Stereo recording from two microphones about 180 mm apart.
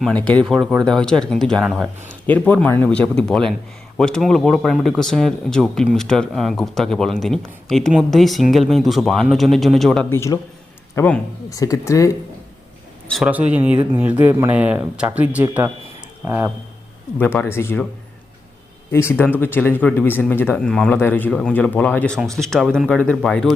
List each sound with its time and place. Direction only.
0.0 s speech: 5° left (ahead or behind)
10.1 s speech: 15° left (ahead or behind)
11.4 s speech: 20° left (ahead or behind)
13.1 s speech: centre (ahead or behind)
17.2 s speech: 10° left (ahead or behind)
18.9 s speech: 15° left (ahead or behind)